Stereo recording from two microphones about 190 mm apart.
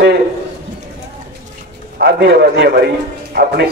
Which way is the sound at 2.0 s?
60° right (ahead or behind).